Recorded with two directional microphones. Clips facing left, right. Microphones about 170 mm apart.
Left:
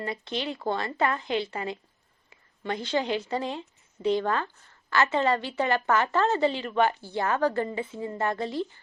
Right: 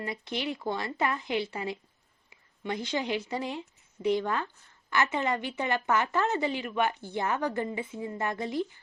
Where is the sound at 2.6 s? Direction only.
15° right (ahead or behind).